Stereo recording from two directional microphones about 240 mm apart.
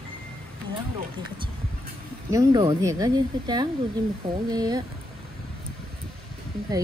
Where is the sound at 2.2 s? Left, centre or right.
Centre.